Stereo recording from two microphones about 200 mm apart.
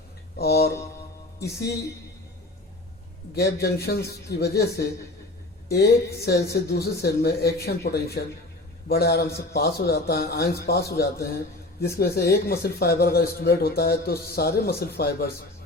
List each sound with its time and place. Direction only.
0.3 s music: 50° left (ahead or behind)
3.3 s a woman's voice: 55° left (ahead or behind)